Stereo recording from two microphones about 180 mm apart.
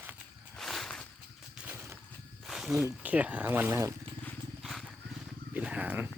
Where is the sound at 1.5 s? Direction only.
10° right (ahead or behind).